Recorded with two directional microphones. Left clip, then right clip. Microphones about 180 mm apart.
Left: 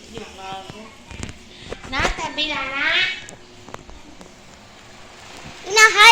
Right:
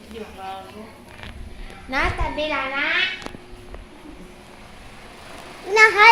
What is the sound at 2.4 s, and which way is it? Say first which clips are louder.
Speech: left 2 dB; 50° right (ahead or behind).